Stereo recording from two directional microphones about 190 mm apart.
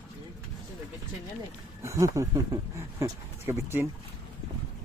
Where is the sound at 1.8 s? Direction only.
15° right (ahead or behind).